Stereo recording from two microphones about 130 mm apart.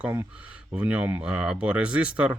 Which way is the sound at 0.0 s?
15° right (ahead or behind).